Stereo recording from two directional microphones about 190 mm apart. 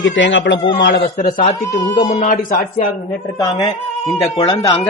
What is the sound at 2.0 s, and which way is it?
Speech, 40° left (ahead or behind).